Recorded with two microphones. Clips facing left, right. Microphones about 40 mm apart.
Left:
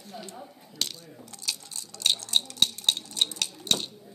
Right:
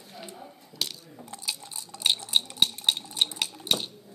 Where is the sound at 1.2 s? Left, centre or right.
Centre.